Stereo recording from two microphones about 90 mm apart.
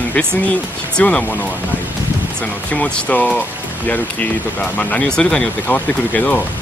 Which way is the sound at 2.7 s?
15° left (ahead or behind).